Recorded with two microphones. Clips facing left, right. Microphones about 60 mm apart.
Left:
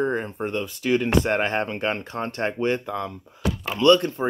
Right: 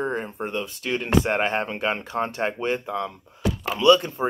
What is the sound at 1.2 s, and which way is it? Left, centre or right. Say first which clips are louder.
Speech: even; centre.